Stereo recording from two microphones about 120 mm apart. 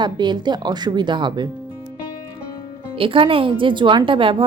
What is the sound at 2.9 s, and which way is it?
A woman's voice, 45° right (ahead or behind).